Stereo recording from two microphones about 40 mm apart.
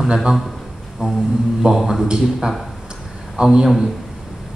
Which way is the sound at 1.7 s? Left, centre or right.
Centre.